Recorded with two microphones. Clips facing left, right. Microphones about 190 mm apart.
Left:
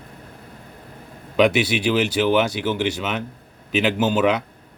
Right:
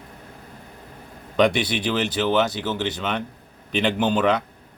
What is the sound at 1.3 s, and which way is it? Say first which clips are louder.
Speech: left 2 dB; 5° left (ahead or behind).